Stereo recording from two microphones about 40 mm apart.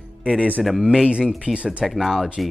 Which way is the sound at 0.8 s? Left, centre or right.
Centre.